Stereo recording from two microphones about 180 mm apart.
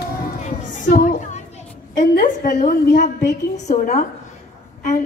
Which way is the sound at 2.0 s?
45° left (ahead or behind).